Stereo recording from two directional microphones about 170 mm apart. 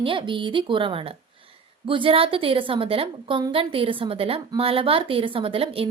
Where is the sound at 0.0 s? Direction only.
30° right (ahead or behind).